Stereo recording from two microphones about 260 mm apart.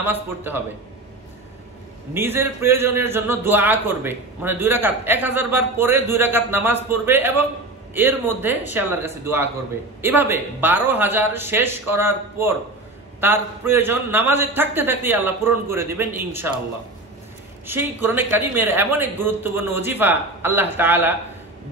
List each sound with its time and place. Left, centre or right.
0.0 s a man's voice: centre
2.1 s a man's voice: centre
17.6 s a man's voice: centre